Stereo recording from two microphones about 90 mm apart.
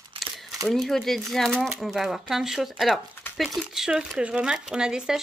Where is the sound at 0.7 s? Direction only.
Centre (ahead or behind).